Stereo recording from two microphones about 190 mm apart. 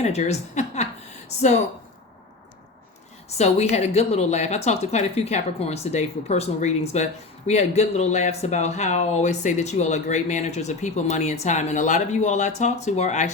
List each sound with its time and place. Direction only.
0.0 s a woman's voice: 35° left (ahead or behind)
3.2 s a woman's voice: 35° left (ahead or behind)